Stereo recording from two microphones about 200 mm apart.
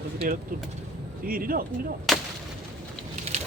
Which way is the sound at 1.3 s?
45° right (ahead or behind).